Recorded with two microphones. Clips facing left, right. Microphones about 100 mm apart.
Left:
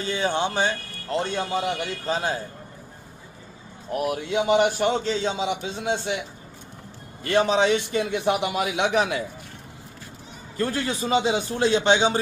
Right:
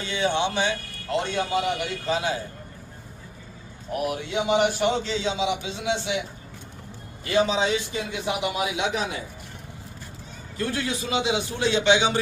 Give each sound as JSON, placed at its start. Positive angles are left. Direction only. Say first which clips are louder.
{"t": 0.0, "sound": "a man's voice", "louder": "even", "side_deg": 40}
{"t": 3.9, "sound": "a man's voice", "louder": "left 2 dB", "side_deg": 40}
{"t": 7.3, "sound": "a man's voice", "louder": "left 2 dB", "side_deg": 60}
{"t": 10.6, "sound": "a man's voice", "louder": "left 2 dB", "side_deg": 40}